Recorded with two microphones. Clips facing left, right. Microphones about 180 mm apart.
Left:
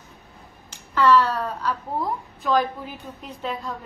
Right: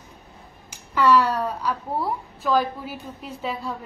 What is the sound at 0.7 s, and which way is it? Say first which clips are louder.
A woman's voice: even; 10° right (ahead or behind).